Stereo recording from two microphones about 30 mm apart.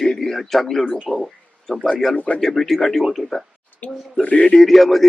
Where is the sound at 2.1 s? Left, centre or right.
Left.